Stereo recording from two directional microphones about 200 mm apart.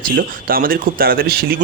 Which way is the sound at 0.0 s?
45° right (ahead or behind).